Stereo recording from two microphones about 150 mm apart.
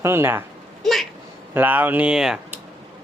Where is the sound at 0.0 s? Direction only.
15° right (ahead or behind).